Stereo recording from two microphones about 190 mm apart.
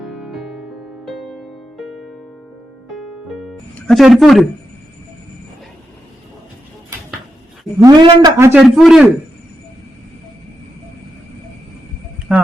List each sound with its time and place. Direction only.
0.0 s music: centre (ahead or behind)
7.8 s a man's voice: 20° right (ahead or behind)
8.6 s a man's voice: centre (ahead or behind)
12.3 s a sound: 5° right (ahead or behind)